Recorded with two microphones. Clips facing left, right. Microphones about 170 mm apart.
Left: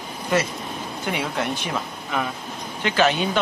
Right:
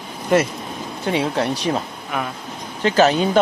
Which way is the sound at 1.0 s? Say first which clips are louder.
Right 6 dB; 35° right (ahead or behind).